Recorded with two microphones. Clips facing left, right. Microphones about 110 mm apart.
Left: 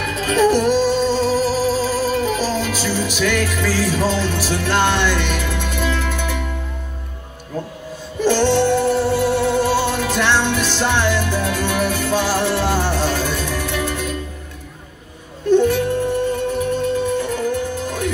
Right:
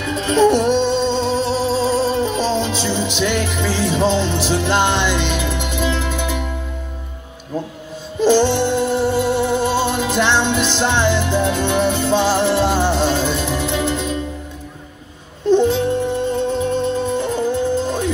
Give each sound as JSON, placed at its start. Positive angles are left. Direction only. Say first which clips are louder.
{"t": 0.0, "sound": "music", "louder": "right 2 dB", "side_deg": -30}
{"t": 7.5, "sound": "speech", "louder": "right 2 dB", "side_deg": -15}
{"t": 8.2, "sound": "music", "louder": "right 1 dB", "side_deg": -15}
{"t": 15.5, "sound": "music", "louder": "even", "side_deg": -20}